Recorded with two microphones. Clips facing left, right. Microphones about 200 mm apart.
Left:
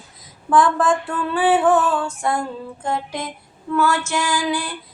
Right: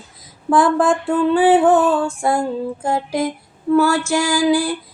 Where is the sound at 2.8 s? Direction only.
30° right (ahead or behind).